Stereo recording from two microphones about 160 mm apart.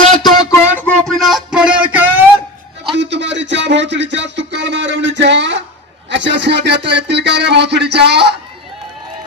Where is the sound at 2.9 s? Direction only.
90° right.